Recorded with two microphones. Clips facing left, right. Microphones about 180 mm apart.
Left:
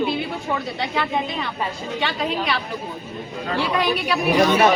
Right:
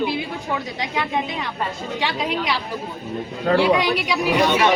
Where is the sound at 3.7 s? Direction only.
80° right.